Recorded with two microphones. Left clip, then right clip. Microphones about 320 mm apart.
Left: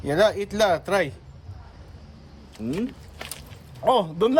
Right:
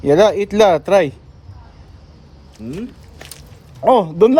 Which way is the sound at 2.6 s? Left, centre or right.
Left.